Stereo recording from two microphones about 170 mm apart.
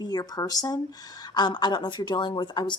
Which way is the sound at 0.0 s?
25° left (ahead or behind).